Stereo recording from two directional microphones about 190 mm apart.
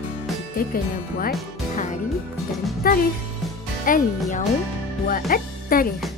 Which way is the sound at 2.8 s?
50° left (ahead or behind).